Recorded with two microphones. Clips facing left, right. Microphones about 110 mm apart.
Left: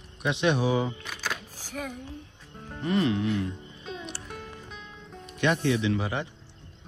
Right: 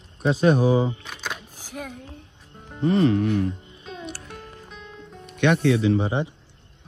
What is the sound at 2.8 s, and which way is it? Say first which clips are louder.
Speech: right 6 dB; 35° right (ahead or behind).